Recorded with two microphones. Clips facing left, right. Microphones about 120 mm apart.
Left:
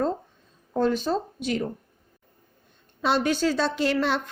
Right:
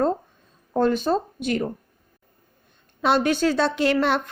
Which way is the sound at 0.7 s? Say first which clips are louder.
Right 3 dB; 55° right (ahead or behind).